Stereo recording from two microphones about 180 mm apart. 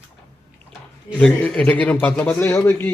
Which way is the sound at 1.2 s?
5° left (ahead or behind).